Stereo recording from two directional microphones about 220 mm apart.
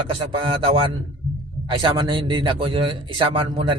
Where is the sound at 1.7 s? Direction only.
20° right (ahead or behind).